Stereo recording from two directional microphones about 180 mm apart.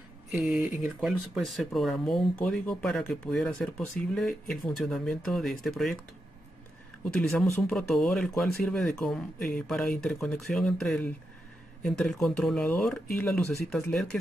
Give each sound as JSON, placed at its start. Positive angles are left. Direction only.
{"t": 0.3, "sound": "speech", "side_deg": -5}
{"t": 7.1, "sound": "speech", "side_deg": 5}